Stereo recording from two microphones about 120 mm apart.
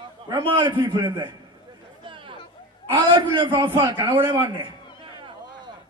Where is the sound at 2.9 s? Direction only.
40° right (ahead or behind).